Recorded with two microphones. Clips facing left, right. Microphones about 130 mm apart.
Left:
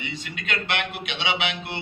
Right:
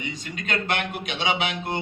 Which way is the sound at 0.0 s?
40° right (ahead or behind).